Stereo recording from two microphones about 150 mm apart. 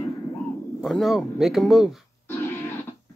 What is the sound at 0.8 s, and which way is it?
Speech, centre (ahead or behind).